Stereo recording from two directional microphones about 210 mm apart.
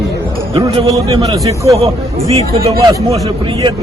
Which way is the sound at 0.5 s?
20° right (ahead or behind).